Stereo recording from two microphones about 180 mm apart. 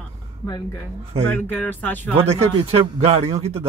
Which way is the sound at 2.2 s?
35° right (ahead or behind).